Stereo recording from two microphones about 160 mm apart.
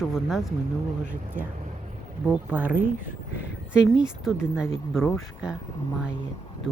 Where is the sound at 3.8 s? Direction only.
5° right (ahead or behind).